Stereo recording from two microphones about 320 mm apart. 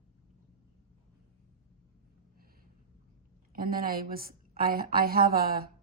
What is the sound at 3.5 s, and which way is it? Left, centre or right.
Speech, right.